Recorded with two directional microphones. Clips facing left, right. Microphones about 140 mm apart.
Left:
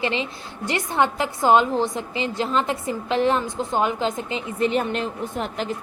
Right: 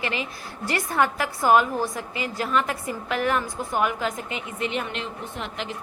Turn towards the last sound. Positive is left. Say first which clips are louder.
# left 6 dB
turn(degrees=40)  # may be behind; listen again after turning